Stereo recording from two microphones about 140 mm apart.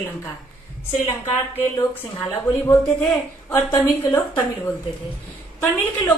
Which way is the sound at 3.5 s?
20° left (ahead or behind).